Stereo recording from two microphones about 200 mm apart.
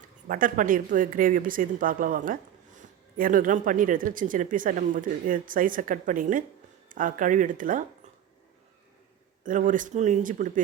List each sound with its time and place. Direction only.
0.3 s a woman's voice: 45° right (ahead or behind)
9.4 s speech: 40° right (ahead or behind)